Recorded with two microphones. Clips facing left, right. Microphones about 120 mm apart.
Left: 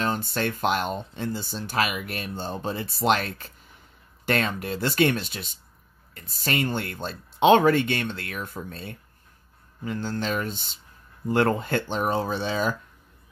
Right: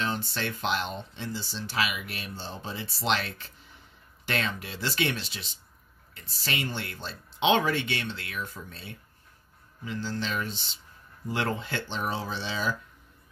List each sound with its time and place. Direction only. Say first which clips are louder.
0.0 s speech: left 5 dB; 50° left (ahead or behind)